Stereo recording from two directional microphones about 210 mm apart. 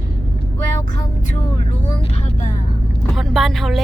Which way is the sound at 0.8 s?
35° left (ahead or behind).